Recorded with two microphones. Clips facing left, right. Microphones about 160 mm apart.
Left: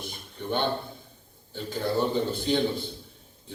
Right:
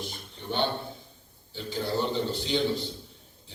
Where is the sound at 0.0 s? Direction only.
50° left (ahead or behind).